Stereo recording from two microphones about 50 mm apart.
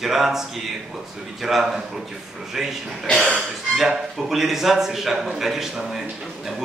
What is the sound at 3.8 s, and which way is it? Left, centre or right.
Speech, centre.